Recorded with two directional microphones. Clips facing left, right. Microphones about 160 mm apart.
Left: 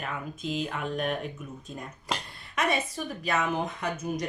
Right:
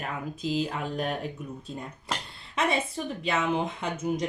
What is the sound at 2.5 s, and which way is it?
Speech, 25° right (ahead or behind).